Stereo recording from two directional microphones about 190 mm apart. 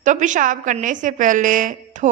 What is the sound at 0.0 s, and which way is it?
A woman's voice, 40° right (ahead or behind).